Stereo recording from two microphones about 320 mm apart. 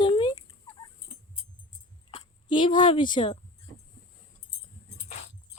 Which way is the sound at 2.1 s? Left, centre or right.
Centre.